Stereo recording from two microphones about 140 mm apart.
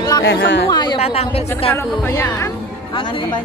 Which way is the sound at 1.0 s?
45° left (ahead or behind).